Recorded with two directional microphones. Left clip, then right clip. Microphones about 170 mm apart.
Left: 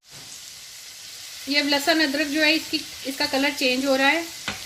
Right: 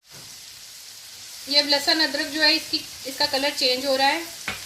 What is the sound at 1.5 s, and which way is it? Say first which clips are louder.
Stir: right 1 dB; 50° left (ahead or behind).